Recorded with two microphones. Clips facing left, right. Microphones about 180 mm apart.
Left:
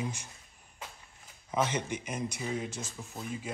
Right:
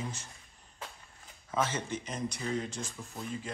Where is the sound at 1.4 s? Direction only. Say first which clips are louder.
Left 2 dB; 15° left (ahead or behind).